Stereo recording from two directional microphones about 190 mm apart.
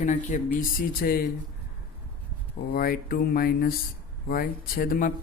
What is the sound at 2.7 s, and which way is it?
Speech, 50° left (ahead or behind).